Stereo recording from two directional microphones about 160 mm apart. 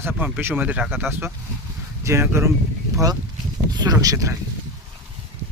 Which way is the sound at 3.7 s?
25° right (ahead or behind).